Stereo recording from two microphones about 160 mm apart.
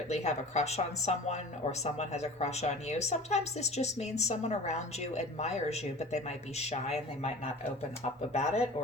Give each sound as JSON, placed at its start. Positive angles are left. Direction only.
{"t": 0.1, "sound": "a woman's voice", "side_deg": 45}